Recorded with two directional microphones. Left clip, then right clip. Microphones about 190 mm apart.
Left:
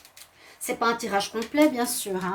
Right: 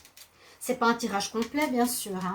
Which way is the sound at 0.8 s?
40° left (ahead or behind).